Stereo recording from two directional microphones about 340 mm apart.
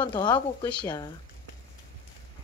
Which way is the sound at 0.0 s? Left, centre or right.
Centre.